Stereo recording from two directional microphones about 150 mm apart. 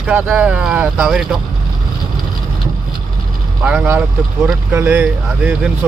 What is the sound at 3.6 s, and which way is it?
Speech, 10° right (ahead or behind).